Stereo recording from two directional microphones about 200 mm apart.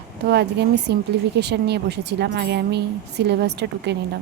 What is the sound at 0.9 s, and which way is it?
Speech, 55° right (ahead or behind).